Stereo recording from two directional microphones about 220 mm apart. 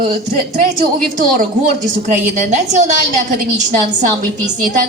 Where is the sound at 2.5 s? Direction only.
30° right (ahead or behind).